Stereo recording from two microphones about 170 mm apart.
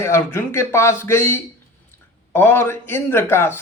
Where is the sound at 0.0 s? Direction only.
15° left (ahead or behind).